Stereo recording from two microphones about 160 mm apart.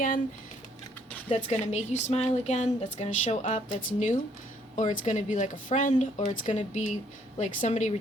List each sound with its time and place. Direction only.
1.3 s speech: 45° left (ahead or behind)